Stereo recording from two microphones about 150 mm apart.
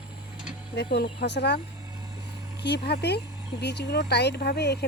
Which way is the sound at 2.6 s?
90° left.